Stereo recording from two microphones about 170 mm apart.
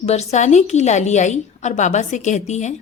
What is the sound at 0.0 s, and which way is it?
Speech, 40° left (ahead or behind).